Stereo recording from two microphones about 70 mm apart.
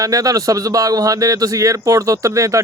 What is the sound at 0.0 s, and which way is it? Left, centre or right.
Speech, right.